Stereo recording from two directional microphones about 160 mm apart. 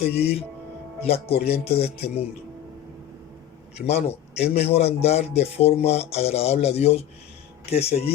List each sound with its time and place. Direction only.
0.0 s a man's voice: 40° left (ahead or behind)
3.8 s a man's voice: 40° left (ahead or behind)